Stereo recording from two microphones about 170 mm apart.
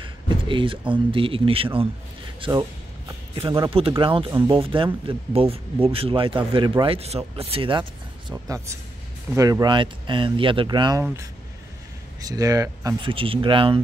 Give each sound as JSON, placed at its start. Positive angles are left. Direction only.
{"t": 0.0, "sound": "speech", "side_deg": -30}
{"t": 4.0, "sound": "speech", "side_deg": -30}
{"t": 8.3, "sound": "speech", "side_deg": -20}
{"t": 12.2, "sound": "speech", "side_deg": -20}
{"t": 13.0, "sound": "speech", "side_deg": -30}